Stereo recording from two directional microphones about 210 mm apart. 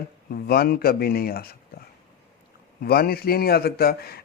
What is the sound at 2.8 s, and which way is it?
Speech, 45° left (ahead or behind).